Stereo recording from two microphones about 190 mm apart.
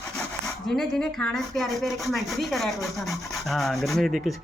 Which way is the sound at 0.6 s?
Centre (ahead or behind).